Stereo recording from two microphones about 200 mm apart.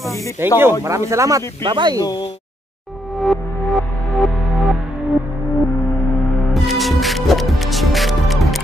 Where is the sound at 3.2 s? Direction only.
Centre (ahead or behind).